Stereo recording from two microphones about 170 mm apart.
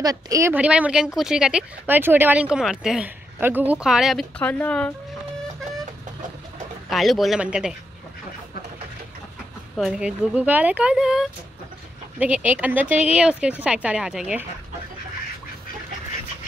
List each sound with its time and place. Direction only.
0.0 s speech: 20° right (ahead or behind); by 4.9 s 10° left (ahead or behind)
6.9 s speech: centre (ahead or behind)
9.8 s speech: centre (ahead or behind)